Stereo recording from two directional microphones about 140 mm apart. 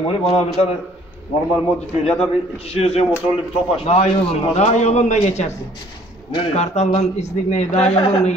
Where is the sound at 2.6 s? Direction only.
45° left (ahead or behind).